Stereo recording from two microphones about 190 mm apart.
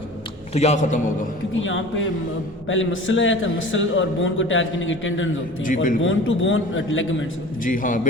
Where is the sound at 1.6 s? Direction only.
90° left.